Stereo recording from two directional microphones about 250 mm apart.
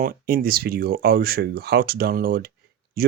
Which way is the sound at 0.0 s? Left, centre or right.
Right.